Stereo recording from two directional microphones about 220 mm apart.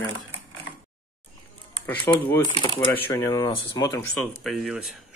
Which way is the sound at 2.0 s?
10° left (ahead or behind).